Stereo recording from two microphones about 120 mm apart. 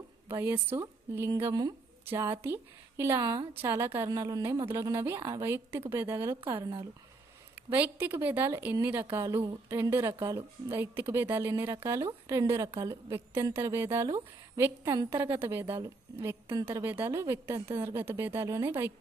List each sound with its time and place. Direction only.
0.3 s a woman's voice: 20° right (ahead or behind)
6.5 s speech: 45° right (ahead or behind)
7.7 s a woman's voice: 15° right (ahead or behind)